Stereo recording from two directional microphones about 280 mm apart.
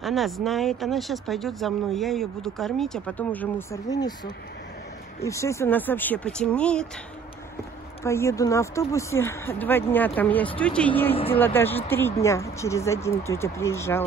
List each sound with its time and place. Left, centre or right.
0.0 s speech: centre
5.2 s speech: centre
8.0 s speech: centre